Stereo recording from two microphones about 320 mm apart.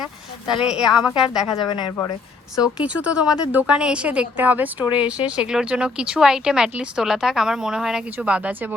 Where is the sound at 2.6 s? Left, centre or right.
Centre.